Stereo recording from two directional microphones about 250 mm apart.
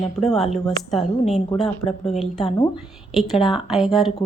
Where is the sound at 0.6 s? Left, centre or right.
Centre.